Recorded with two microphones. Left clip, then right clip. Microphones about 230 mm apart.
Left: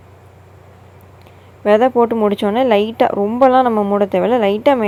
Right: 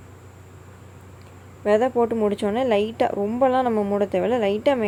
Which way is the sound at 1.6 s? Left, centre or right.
Centre.